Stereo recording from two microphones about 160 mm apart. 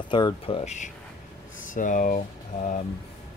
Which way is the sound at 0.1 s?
30° left (ahead or behind).